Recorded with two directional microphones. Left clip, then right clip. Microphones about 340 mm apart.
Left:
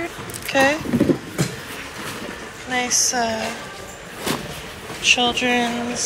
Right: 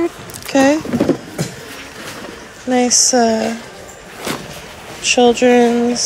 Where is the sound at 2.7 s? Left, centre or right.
Centre.